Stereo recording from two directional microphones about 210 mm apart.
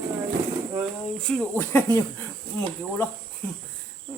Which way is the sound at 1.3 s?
10° left (ahead or behind).